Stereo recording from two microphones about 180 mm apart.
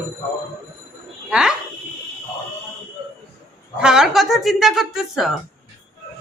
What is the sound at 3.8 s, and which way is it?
Speech, 5° right (ahead or behind).